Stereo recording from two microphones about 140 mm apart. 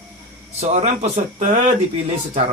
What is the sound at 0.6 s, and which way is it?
Speech, 50° right (ahead or behind).